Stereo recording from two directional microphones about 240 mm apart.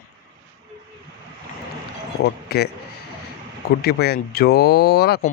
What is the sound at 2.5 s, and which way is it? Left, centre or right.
Speech, left.